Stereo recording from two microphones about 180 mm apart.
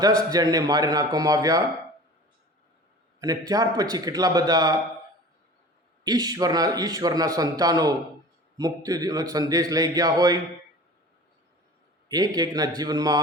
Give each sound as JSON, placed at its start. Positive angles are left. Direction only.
{"t": 0.0, "sound": "a man's voice", "side_deg": -20}
{"t": 3.2, "sound": "a man's voice", "side_deg": -20}
{"t": 6.1, "sound": "a man's voice", "side_deg": -20}
{"t": 12.0, "sound": "a man's voice", "side_deg": -20}